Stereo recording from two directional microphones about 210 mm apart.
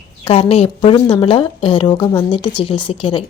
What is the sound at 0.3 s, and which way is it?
A woman's voice, 30° left (ahead or behind).